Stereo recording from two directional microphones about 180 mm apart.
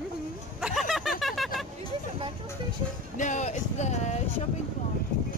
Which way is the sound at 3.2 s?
45° left (ahead or behind).